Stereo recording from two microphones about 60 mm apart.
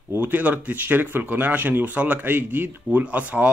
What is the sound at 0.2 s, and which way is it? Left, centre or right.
Speech, right.